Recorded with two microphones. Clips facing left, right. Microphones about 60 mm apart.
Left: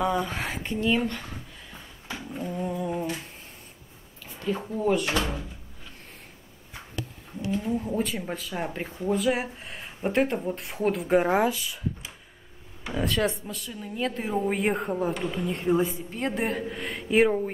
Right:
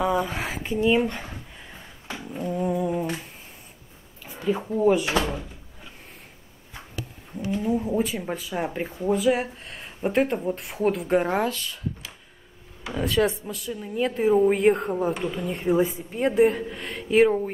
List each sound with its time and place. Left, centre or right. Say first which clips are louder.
0.0 s speech: right 2 dB; centre
0.9 s speech: right 4 dB; centre
2.3 s a sound: right 5 dB; centre
4.3 s speech: right 4 dB; centre
7.5 s speech: right 4 dB; centre
12.8 s speech: right 3 dB; centre